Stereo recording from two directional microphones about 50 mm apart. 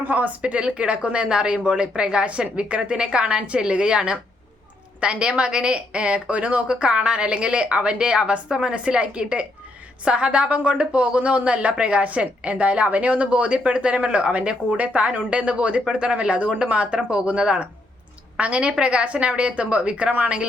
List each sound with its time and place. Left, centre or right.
0.0 s a woman's voice: right